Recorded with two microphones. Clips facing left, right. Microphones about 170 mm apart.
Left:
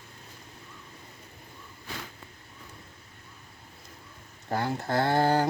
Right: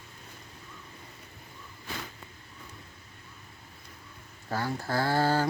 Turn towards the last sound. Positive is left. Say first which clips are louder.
# left 2 dB
turn(degrees=20)  # may be behind; listen again after turning